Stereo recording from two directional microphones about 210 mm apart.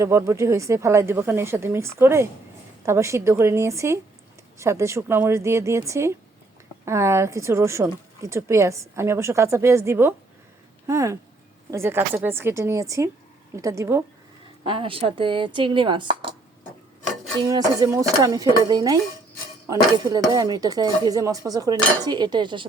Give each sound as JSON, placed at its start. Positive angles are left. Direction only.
{"t": 0.0, "sound": "speech", "side_deg": -15}
{"t": 14.6, "sound": "a woman's voice", "side_deg": -25}
{"t": 17.4, "sound": "speech", "side_deg": -15}